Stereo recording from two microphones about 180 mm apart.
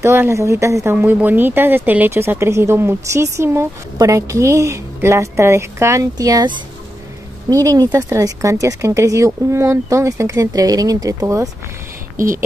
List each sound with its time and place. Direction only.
0.0 s speech: 15° right (ahead or behind)
12.2 s speech: 50° right (ahead or behind)